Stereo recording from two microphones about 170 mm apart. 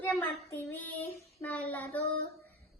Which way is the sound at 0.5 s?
10° left (ahead or behind).